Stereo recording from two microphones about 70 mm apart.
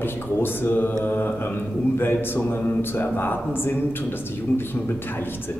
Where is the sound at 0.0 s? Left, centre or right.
Left.